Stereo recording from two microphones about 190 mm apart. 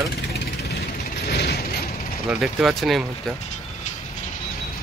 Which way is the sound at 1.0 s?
55° left (ahead or behind).